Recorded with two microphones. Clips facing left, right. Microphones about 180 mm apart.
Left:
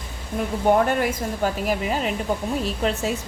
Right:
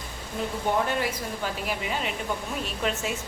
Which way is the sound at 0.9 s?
45° left (ahead or behind).